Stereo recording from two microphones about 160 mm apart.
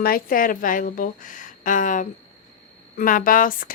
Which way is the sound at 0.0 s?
65° left (ahead or behind).